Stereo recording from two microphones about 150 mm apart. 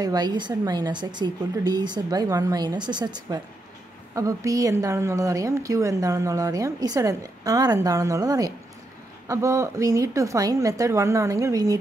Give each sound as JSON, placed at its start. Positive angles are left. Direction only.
{"t": 0.0, "sound": "a woman's voice", "side_deg": -25}